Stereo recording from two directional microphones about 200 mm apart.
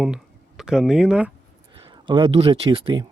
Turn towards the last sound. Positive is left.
turn(degrees=-25)  # may be behind; listen again after turning